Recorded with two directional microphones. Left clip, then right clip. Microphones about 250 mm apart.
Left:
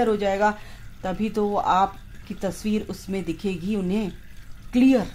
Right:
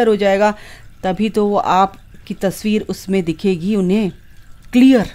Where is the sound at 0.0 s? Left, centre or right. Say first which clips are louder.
Right 8 dB; right.